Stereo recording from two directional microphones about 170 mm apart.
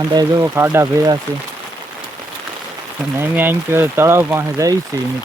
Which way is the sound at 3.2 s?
10° right (ahead or behind).